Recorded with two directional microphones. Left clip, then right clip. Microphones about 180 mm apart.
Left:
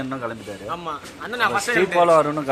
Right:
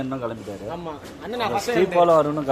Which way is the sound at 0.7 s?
10° right (ahead or behind).